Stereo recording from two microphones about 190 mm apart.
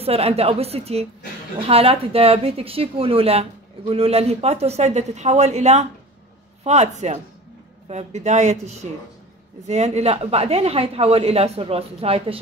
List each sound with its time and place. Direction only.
0.0 s speech: 30° right (ahead or behind)